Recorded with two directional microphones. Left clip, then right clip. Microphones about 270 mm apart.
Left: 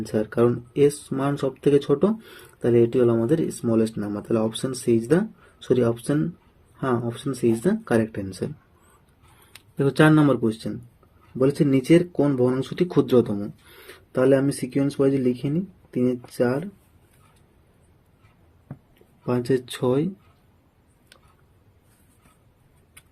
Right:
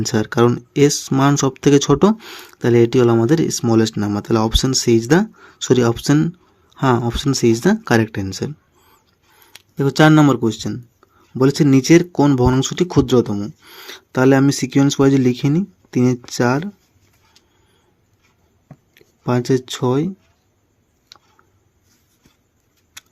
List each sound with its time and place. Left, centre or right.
0.0 s speech: right
9.5 s speech: centre
19.2 s speech: right